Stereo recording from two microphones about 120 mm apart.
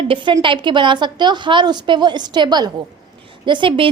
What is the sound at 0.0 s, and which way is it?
A woman's voice, 45° right (ahead or behind).